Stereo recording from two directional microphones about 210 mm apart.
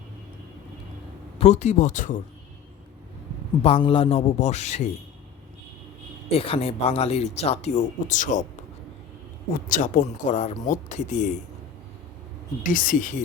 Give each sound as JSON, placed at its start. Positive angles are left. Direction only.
{"t": 1.4, "sound": "speech", "side_deg": 30}
{"t": 3.6, "sound": "speech", "side_deg": 25}
{"t": 6.3, "sound": "speech", "side_deg": 25}
{"t": 9.6, "sound": "speech", "side_deg": 40}
{"t": 12.6, "sound": "speech", "side_deg": 40}